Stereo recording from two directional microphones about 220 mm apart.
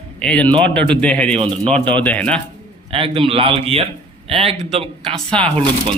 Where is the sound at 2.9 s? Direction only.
25° right (ahead or behind).